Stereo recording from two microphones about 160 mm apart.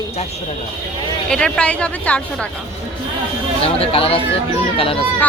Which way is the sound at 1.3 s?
5° left (ahead or behind).